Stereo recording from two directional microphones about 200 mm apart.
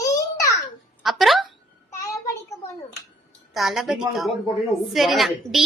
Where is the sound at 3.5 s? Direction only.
Centre (ahead or behind).